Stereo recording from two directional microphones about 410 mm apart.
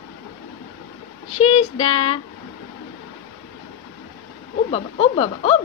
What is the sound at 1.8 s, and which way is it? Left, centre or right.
Speech, centre.